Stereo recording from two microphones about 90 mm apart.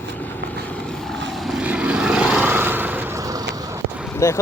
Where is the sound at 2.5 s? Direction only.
25° right (ahead or behind).